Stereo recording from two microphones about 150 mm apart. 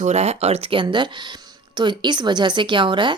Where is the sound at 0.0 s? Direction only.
45° right (ahead or behind).